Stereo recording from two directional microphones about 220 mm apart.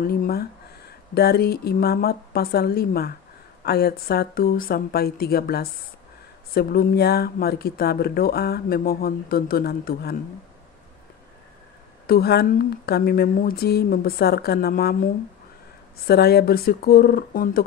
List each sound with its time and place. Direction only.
0.0 s speech: 45° left (ahead or behind)
12.1 s speech: 45° left (ahead or behind)
16.1 s speech: 45° left (ahead or behind)